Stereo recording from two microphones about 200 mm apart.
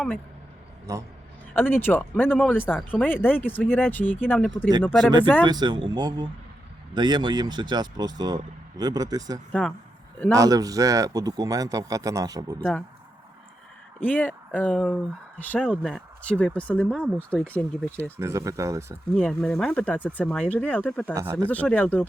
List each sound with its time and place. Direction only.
0.9 s a man's voice: 15° right (ahead or behind)
1.5 s speech: 10° left (ahead or behind)
5.5 s speech: 20° right (ahead or behind)
9.5 s speech: 5° left (ahead or behind)
10.3 s a man's voice: 15° right (ahead or behind)
12.5 s speech: 5° left (ahead or behind)
14.0 s speech: 10° left (ahead or behind)
18.2 s a man's voice: 15° right (ahead or behind)
19.1 s speech: 5° left (ahead or behind)